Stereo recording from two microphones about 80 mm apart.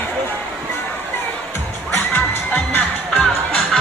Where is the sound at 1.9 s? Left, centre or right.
Left.